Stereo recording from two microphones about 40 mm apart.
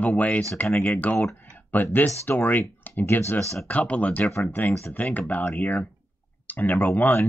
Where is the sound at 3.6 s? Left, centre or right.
Left.